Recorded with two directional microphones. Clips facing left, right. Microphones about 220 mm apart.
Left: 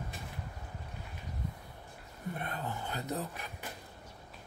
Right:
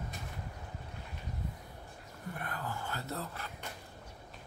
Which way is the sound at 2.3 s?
20° left (ahead or behind).